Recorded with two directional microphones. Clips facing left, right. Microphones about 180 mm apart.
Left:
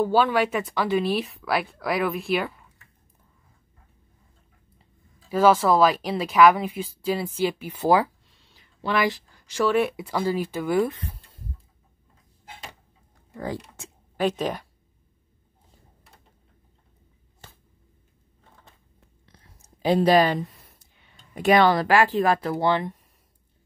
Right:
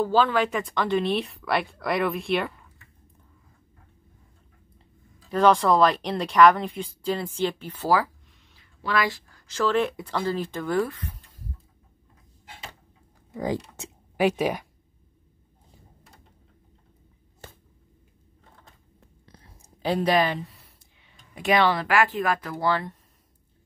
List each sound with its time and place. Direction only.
0.0 s speech: 10° left (ahead or behind)
5.3 s speech: 5° left (ahead or behind)
13.3 s speech: 15° right (ahead or behind)
20.0 s speech: 35° left (ahead or behind); by 22.9 s 20° left (ahead or behind)